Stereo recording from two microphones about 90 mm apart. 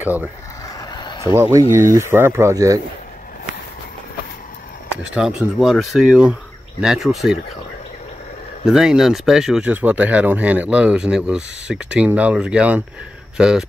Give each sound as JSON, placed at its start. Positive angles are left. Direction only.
{"t": 0.0, "sound": "speech", "side_deg": -20}
{"t": 0.7, "sound": "a sound", "side_deg": 50}
{"t": 1.2, "sound": "speech", "side_deg": -30}
{"t": 2.5, "sound": "speech", "side_deg": -40}
{"t": 5.1, "sound": "speech", "side_deg": -5}
{"t": 8.6, "sound": "speech", "side_deg": -5}
{"t": 9.7, "sound": "speech", "side_deg": -20}